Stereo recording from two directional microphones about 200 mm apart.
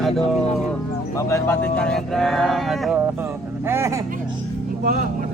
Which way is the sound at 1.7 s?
5° left (ahead or behind).